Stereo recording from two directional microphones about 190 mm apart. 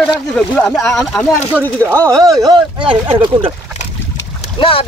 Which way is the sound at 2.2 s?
20° right (ahead or behind).